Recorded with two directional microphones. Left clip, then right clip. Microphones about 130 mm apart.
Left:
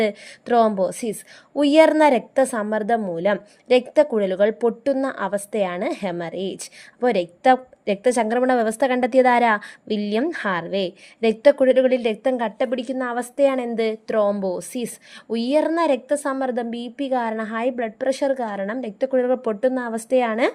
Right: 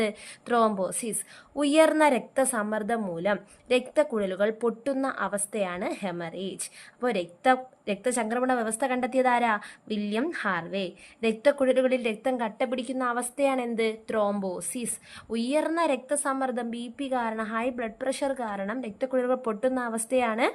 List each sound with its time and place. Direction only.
0.0 s a woman's voice: 30° left (ahead or behind)